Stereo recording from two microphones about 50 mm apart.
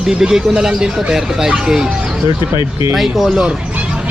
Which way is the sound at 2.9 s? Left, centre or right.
Centre.